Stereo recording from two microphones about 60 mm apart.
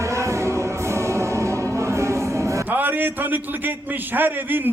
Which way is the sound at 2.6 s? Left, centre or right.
Right.